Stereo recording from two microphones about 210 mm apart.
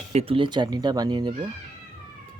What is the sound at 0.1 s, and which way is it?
Speech, 30° right (ahead or behind).